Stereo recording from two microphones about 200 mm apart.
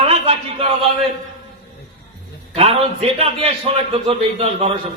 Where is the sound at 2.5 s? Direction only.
30° right (ahead or behind).